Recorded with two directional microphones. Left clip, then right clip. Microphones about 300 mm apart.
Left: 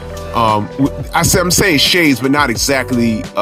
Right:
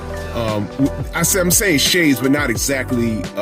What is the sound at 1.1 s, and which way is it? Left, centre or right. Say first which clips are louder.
Speech: left 6 dB; left.